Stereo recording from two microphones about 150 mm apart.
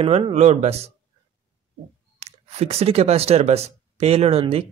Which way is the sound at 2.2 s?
45° right (ahead or behind).